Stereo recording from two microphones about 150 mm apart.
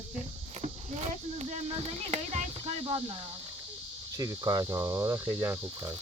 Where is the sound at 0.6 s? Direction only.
45° right (ahead or behind).